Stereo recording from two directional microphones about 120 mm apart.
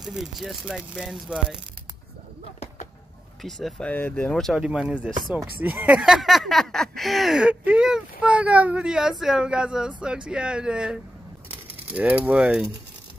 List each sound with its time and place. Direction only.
0.0 s speech: centre (ahead or behind)
3.4 s speech: centre (ahead or behind)
3.9 s speech: 15° left (ahead or behind)
4.3 s speech: 5° left (ahead or behind)
4.6 s speech: 10° right (ahead or behind)